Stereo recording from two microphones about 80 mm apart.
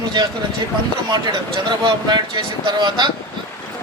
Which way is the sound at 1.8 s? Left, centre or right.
Right.